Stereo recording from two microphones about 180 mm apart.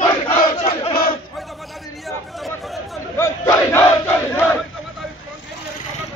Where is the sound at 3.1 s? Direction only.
15° left (ahead or behind).